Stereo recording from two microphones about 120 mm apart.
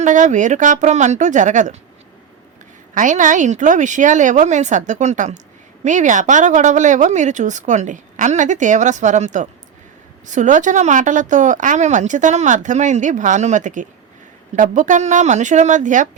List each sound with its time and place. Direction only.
0.0 s a woman's voice: 90° right
2.9 s a woman's voice: 90° right